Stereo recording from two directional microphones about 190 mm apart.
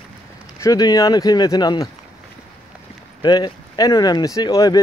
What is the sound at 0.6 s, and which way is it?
Speech, 20° left (ahead or behind).